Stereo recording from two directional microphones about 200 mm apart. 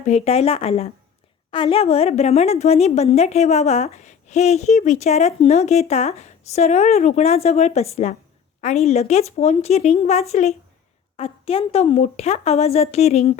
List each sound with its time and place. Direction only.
0.0 s a woman's voice: 35° left (ahead or behind)